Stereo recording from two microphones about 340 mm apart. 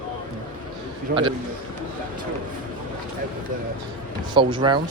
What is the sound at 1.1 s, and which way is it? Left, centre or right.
Speech, centre.